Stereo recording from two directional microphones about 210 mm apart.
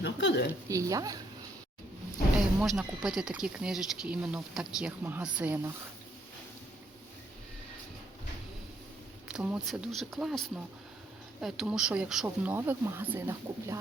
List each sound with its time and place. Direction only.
0.0 s speech: 55° left (ahead or behind)
0.7 s a woman's voice: 15° right (ahead or behind)
2.6 s speech: centre (ahead or behind)
9.3 s speech: 5° right (ahead or behind)